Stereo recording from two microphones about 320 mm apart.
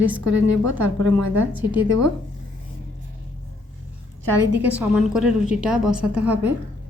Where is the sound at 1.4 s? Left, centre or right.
Centre.